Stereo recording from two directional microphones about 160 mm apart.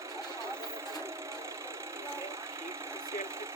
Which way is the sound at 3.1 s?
15° right (ahead or behind).